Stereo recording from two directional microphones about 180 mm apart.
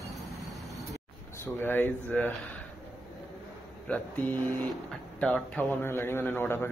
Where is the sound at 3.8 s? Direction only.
10° left (ahead or behind).